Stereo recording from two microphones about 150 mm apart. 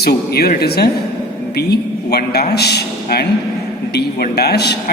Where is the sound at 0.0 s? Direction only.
90° left.